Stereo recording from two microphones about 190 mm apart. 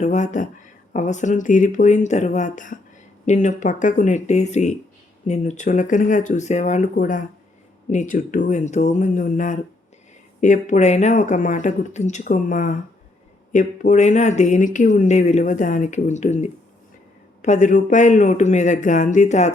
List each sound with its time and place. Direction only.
0.0 s speech: 40° left (ahead or behind)